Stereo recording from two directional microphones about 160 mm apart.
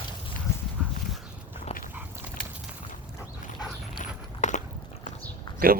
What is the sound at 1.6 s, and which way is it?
Dog, 55° left (ahead or behind).